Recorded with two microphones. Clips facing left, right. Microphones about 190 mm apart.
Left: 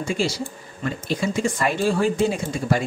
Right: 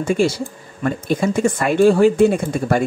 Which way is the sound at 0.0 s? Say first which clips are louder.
Right 7 dB; 55° right (ahead or behind).